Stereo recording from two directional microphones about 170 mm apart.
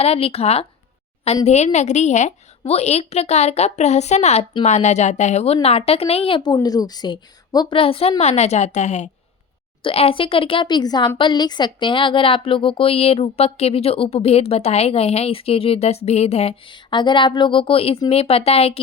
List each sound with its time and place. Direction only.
0.0 s a woman's voice: 35° left (ahead or behind)